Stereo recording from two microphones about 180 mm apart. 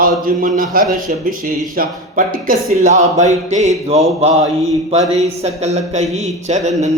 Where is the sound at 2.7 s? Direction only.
40° right (ahead or behind).